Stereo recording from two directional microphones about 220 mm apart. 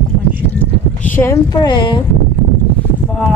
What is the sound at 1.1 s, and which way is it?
Speech, 15° left (ahead or behind).